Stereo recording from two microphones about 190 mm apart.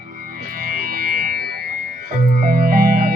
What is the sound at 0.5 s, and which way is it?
Music, 50° right (ahead or behind).